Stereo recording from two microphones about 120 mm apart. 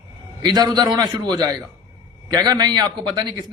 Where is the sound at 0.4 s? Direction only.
35° right (ahead or behind).